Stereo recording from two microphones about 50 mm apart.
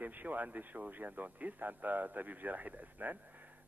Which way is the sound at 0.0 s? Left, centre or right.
Right.